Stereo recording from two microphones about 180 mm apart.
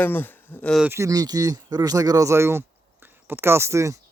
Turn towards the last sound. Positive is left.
turn(degrees=-15)  # may be behind; listen again after turning